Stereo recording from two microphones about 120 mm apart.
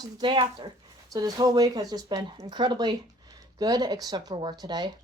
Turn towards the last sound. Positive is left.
turn(degrees=-35)  # may be behind; listen again after turning